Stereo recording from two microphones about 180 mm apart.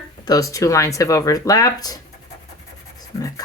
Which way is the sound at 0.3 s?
20° left (ahead or behind).